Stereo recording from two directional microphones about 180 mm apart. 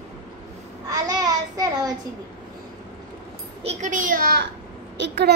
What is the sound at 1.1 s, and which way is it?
Child singing, 20° right (ahead or behind).